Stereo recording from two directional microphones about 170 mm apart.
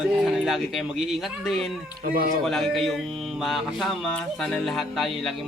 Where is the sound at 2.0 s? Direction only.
60° right (ahead or behind).